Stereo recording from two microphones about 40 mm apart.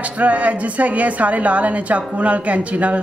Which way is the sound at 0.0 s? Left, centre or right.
Right.